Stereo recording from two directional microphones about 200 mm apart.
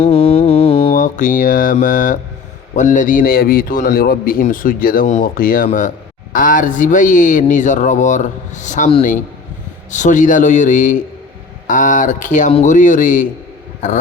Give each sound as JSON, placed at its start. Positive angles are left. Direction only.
{"t": 0.0, "sound": "mantra", "side_deg": 30}
{"t": 0.9, "sound": "mantra", "side_deg": 40}
{"t": 2.7, "sound": "a man's voice", "side_deg": 40}